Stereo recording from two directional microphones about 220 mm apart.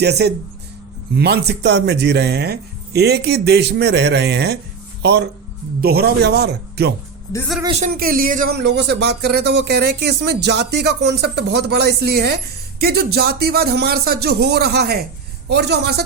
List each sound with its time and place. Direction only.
0.0 s speech: 50° right (ahead or behind)
7.3 s speech: 5° left (ahead or behind)
7.8 s speech: 40° right (ahead or behind)